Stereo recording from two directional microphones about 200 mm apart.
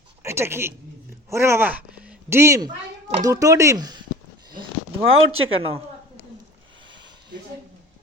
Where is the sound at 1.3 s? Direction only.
15° right (ahead or behind).